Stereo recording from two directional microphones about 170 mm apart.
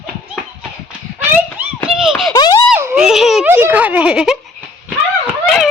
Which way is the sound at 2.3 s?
25° left (ahead or behind).